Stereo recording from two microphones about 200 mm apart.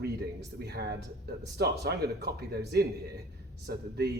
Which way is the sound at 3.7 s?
55° right (ahead or behind).